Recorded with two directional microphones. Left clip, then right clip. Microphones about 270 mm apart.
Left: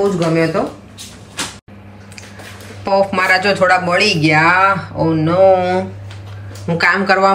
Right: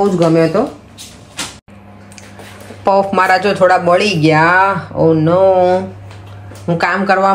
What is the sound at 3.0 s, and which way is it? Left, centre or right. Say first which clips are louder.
Speech: even; centre.